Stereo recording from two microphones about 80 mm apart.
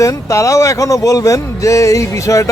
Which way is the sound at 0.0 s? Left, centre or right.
Left.